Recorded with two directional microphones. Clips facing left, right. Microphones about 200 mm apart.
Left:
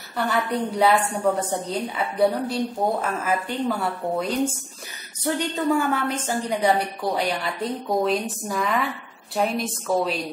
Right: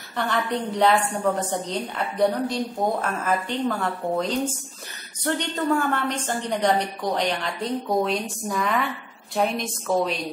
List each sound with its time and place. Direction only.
0.2 s a woman's voice: 5° left (ahead or behind)